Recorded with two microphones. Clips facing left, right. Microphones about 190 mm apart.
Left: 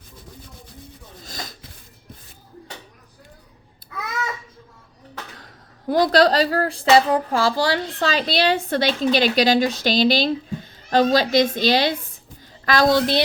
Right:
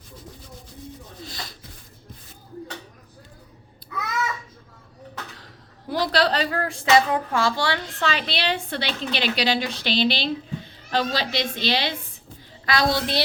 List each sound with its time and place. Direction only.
1.2 s rub: 45° left (ahead or behind)
5.9 s a woman's voice: 45° left (ahead or behind)